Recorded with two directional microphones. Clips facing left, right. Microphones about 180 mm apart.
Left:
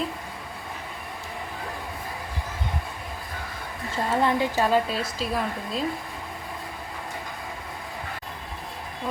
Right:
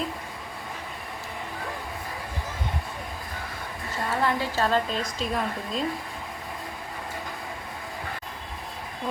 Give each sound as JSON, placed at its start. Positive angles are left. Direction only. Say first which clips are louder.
{"t": 4.1, "sound": "a woman's voice", "louder": "left 3 dB", "side_deg": 20}